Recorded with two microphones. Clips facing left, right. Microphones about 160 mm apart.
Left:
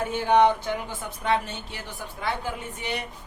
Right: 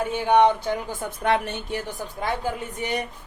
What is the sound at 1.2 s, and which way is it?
A woman's voice, 60° right (ahead or behind).